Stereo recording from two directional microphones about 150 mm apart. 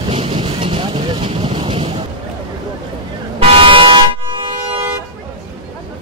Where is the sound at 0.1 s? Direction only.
40° right (ahead or behind).